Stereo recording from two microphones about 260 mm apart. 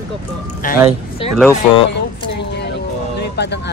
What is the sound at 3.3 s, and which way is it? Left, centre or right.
Speech, left.